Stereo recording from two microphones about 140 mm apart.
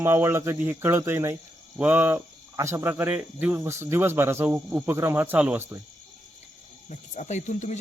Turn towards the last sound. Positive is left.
turn(degrees=60)  # may be behind; listen again after turning